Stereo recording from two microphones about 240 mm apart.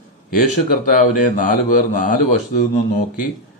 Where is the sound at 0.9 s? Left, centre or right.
Left.